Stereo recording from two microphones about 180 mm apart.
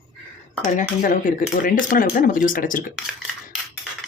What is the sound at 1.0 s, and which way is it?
Speech, 50° left (ahead or behind).